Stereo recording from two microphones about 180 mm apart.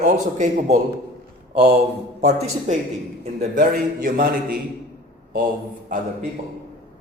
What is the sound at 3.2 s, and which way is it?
A man's voice, 45° right (ahead or behind).